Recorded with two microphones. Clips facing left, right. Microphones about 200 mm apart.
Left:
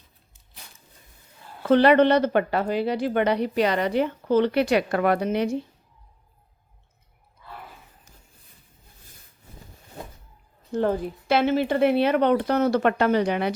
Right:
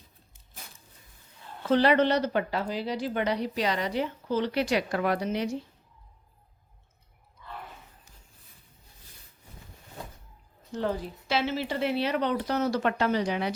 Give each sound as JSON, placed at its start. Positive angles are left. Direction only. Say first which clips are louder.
{"t": 1.6, "sound": "speech", "louder": "left 6 dB", "side_deg": 60}
{"t": 10.8, "sound": "speech", "louder": "left 7 dB", "side_deg": 50}